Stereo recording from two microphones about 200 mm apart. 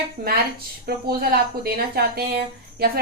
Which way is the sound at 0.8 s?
50° right (ahead or behind).